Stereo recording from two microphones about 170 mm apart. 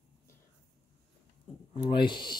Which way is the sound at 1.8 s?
30° left (ahead or behind).